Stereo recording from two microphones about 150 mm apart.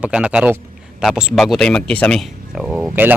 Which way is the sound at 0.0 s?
10° right (ahead or behind).